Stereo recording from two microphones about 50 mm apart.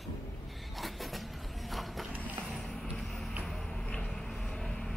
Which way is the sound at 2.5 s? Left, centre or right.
Centre.